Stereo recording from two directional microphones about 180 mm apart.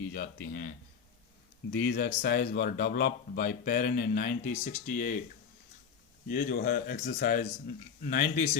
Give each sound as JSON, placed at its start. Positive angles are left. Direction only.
{"t": 0.1, "sound": "speech", "side_deg": 55}
{"t": 1.7, "sound": "speech", "side_deg": 55}
{"t": 6.2, "sound": "speech", "side_deg": 60}